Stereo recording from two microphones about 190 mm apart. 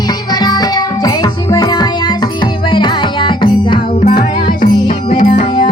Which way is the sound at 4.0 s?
45° left (ahead or behind).